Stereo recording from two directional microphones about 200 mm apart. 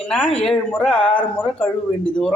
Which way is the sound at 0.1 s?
5° left (ahead or behind).